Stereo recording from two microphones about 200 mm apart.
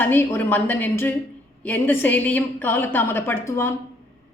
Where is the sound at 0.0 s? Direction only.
10° left (ahead or behind).